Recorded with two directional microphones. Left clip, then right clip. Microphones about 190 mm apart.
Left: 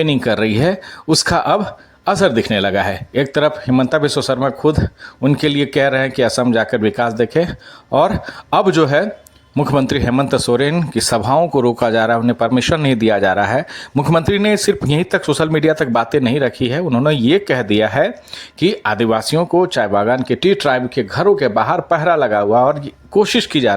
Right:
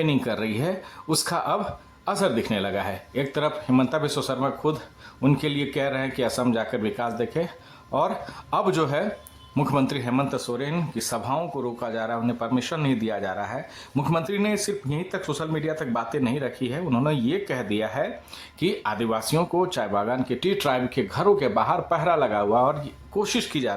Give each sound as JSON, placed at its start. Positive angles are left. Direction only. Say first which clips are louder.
{"t": 0.0, "sound": "speech", "louder": "left 10 dB", "side_deg": 35}